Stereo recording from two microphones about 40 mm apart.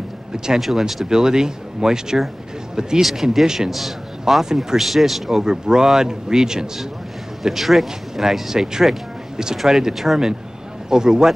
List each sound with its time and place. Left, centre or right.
0.6 s speech: centre
1.0 s speech: centre
3.0 s speech: centre
3.4 s speech: centre
5.4 s speech: centre
7.4 s speech: centre